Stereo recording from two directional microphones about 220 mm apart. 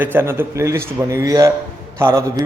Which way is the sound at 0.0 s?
10° right (ahead or behind).